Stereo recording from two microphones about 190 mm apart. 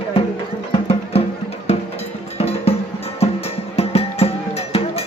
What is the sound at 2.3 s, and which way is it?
Music, 30° left (ahead or behind).